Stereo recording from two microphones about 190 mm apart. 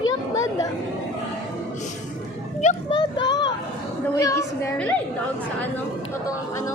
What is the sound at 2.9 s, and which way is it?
A child's voice, 20° left (ahead or behind).